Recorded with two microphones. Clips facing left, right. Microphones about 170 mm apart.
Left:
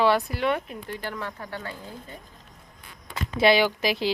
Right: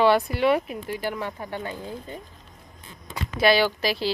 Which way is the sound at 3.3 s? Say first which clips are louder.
Even; 20° left (ahead or behind).